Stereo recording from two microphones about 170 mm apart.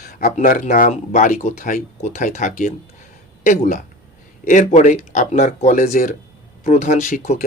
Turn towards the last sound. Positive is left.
turn(degrees=50)  # may be behind; listen again after turning